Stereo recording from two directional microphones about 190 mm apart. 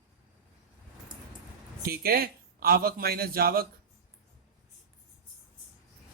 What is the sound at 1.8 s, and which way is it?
Speech, 55° right (ahead or behind).